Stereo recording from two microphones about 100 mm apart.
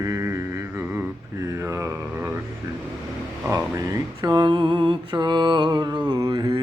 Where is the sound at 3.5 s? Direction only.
35° right (ahead or behind).